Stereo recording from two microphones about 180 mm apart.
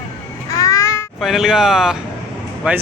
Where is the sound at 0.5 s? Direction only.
20° left (ahead or behind).